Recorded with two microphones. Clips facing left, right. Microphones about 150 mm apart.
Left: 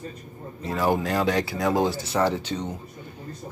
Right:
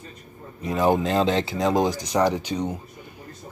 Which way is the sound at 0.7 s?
20° right (ahead or behind).